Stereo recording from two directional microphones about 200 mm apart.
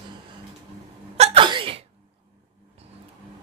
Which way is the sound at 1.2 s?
30° right (ahead or behind).